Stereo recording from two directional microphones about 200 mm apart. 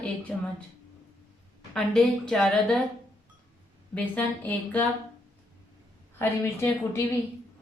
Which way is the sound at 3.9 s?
5° left (ahead or behind).